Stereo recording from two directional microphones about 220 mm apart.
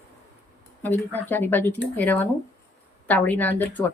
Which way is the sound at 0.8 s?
10° left (ahead or behind).